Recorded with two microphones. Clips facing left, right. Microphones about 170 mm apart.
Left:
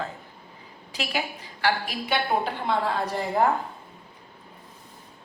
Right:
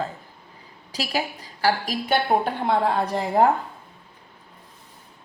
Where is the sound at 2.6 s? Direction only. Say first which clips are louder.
Right 4 dB; 60° right (ahead or behind).